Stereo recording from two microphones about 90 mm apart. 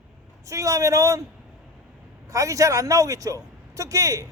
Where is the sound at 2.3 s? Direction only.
35° right (ahead or behind).